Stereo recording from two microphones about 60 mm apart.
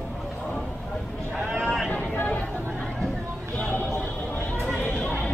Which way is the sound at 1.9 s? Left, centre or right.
Left.